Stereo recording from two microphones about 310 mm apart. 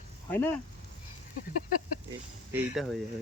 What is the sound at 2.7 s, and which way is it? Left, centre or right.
Speech, centre.